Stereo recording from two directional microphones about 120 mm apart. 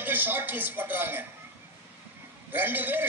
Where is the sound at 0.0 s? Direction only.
15° right (ahead or behind).